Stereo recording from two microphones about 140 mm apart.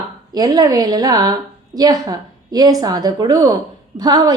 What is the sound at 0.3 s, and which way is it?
A woman's voice, 25° right (ahead or behind).